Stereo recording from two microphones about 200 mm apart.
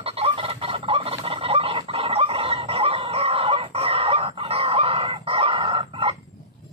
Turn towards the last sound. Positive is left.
turn(degrees=-25)  # may be behind; listen again after turning